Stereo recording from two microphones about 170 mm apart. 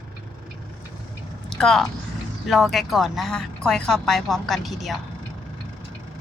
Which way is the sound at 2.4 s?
Centre (ahead or behind).